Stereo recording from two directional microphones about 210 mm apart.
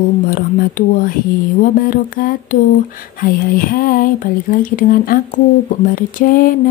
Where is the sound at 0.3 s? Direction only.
40° left (ahead or behind).